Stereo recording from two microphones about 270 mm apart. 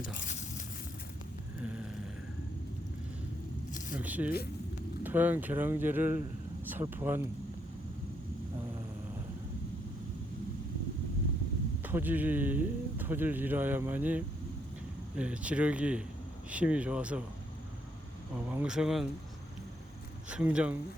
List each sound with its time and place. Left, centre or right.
0.0 s a sound: left
1.6 s a sound: centre
3.9 s speech: centre
11.8 s speech: centre
18.4 s speech: centre
20.3 s speech: centre